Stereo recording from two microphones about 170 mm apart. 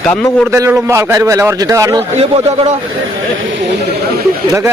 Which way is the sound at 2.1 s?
40° right (ahead or behind).